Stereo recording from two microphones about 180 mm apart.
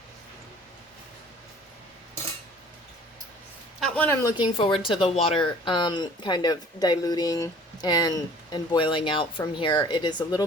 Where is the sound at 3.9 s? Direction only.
10° left (ahead or behind).